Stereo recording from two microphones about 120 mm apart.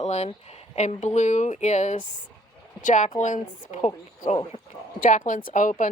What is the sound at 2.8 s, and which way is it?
A woman's voice, 90° left.